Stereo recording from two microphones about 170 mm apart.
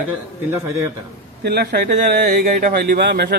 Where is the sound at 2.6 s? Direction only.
60° right (ahead or behind); by 3.3 s 80° right.